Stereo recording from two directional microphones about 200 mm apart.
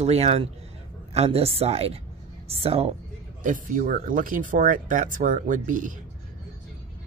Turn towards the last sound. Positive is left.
turn(degrees=-40)  # may be behind; listen again after turning